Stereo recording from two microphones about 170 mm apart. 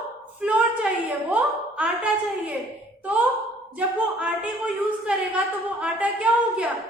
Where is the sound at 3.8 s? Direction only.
5° right (ahead or behind).